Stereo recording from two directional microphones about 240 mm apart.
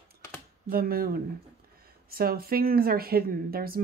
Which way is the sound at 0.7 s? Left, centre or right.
Right.